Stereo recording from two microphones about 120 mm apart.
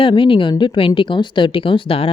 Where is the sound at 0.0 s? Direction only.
45° left (ahead or behind).